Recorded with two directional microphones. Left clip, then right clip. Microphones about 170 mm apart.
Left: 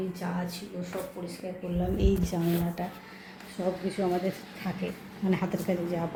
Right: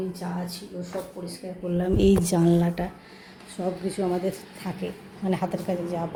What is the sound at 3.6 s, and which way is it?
A woman's voice, 10° right (ahead or behind).